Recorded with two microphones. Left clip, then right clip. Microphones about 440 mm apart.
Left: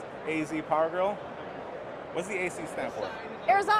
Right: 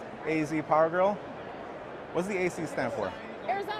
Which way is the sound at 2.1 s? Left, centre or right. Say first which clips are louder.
Right 2 dB; right.